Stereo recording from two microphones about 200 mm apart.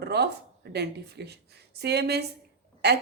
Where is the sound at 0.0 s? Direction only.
55° right (ahead or behind).